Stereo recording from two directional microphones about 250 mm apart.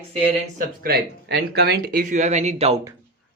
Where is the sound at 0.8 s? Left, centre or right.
Right.